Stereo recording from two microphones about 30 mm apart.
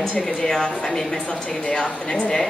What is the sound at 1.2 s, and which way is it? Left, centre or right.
Speech, left.